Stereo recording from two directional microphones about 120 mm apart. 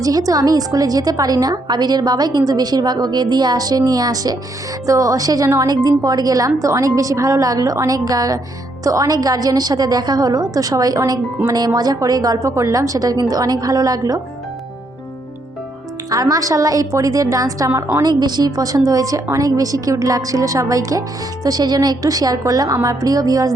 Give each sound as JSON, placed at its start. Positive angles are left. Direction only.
{"t": 0.0, "sound": "a woman's voice", "side_deg": -30}
{"t": 16.0, "sound": "a woman's voice", "side_deg": -30}